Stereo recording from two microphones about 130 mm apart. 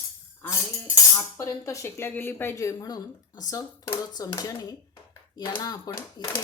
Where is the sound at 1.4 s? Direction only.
25° left (ahead or behind).